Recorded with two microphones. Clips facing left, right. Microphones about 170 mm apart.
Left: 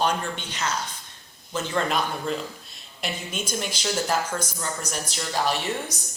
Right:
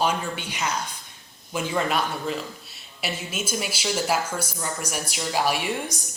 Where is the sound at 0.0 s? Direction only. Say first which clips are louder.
Even; 10° right (ahead or behind).